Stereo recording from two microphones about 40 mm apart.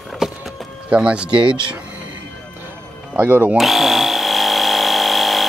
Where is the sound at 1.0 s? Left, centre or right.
Right.